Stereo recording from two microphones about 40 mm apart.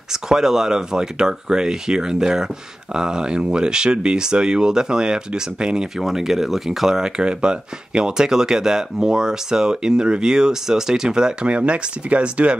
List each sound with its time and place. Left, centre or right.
0.1 s speech: centre
5.9 s speech: centre
7.0 s speech: centre
11.4 s speech: right